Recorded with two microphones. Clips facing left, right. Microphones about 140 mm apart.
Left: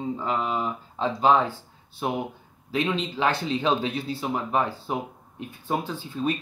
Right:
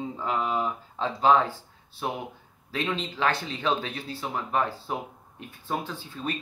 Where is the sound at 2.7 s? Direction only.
15° left (ahead or behind).